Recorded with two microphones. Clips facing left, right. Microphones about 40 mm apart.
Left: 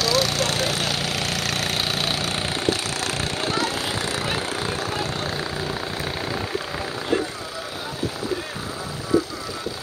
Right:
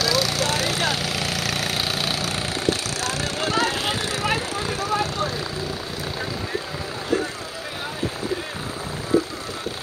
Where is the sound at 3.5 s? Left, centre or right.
Right.